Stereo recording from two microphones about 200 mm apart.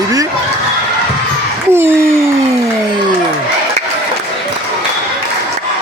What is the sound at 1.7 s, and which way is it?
Speech, 10° right (ahead or behind).